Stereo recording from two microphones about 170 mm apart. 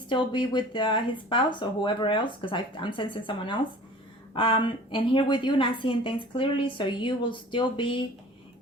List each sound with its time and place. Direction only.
0.1 s a woman's voice: 30° left (ahead or behind)